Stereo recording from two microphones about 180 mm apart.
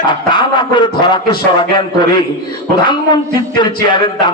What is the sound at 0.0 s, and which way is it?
A man's voice, 25° left (ahead or behind).